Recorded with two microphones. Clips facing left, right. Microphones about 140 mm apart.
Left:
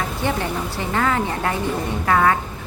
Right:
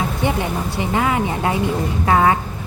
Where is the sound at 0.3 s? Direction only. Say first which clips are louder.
Even; 15° right (ahead or behind).